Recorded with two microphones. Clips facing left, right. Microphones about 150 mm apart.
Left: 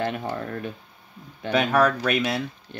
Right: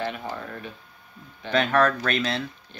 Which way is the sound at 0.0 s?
45° left (ahead or behind).